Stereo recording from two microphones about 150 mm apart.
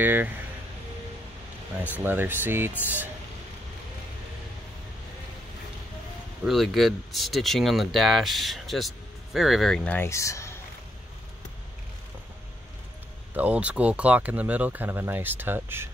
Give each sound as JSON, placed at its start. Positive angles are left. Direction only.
{"t": 0.0, "sound": "speech", "side_deg": -10}
{"t": 2.0, "sound": "speech", "side_deg": -10}
{"t": 6.4, "sound": "speech", "side_deg": 0}
{"t": 9.9, "sound": "speech", "side_deg": 20}
{"t": 13.3, "sound": "speech", "side_deg": -10}